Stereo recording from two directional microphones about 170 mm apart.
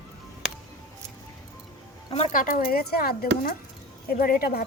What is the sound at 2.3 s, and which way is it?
Speech, 55° left (ahead or behind).